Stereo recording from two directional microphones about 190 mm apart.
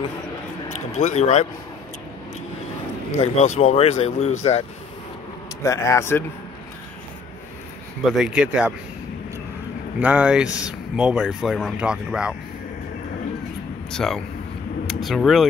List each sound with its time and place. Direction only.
0.7 s speech: 40° left (ahead or behind)
3.2 s speech: 35° left (ahead or behind)
5.6 s speech: 15° left (ahead or behind)
8.1 s speech: 5° right (ahead or behind)
9.9 s speech: 10° right (ahead or behind)
13.9 s speech: centre (ahead or behind)